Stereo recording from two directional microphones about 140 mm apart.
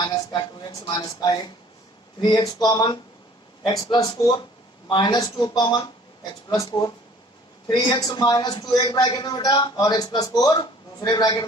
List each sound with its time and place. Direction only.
0.0 s a woman's voice: 30° left (ahead or behind)